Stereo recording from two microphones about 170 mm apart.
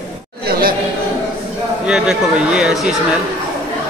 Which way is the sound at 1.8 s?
5° right (ahead or behind).